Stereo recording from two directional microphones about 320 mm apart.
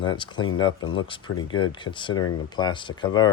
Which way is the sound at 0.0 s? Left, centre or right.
Centre.